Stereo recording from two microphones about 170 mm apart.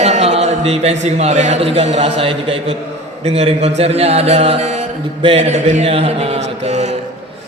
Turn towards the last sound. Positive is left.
turn(degrees=-40)  # may be behind; listen again after turning